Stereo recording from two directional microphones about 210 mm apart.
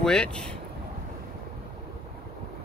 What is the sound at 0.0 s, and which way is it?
Speech, 5° left (ahead or behind).